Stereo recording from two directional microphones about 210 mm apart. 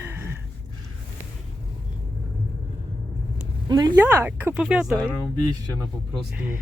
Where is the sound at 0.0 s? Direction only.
10° right (ahead or behind).